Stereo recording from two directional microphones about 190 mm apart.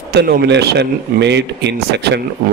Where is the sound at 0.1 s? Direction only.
60° right (ahead or behind).